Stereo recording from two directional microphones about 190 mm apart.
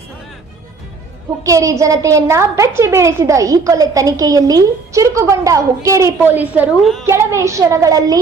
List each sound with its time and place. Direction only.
1.5 s a woman's voice: 15° right (ahead or behind)
7.0 s a woman's voice: 15° right (ahead or behind)